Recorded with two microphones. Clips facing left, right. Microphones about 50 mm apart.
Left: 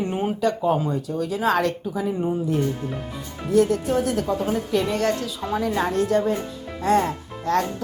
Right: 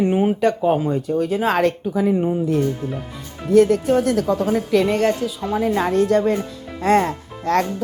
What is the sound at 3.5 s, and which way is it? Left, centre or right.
Speech, right.